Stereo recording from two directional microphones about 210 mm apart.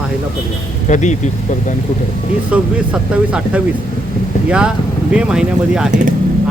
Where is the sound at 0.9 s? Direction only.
35° left (ahead or behind).